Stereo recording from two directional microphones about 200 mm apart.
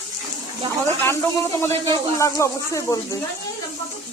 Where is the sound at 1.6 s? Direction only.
15° left (ahead or behind).